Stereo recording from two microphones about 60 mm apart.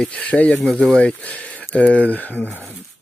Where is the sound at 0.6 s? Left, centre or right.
Centre.